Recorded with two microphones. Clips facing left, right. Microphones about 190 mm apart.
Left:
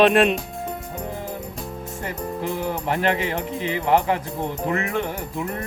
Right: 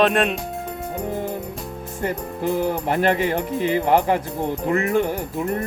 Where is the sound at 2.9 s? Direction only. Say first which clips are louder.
Right 2 dB; 45° right (ahead or behind).